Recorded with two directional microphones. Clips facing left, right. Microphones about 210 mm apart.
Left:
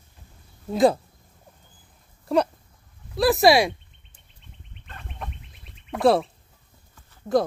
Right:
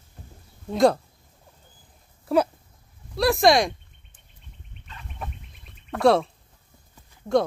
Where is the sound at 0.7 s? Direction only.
5° left (ahead or behind).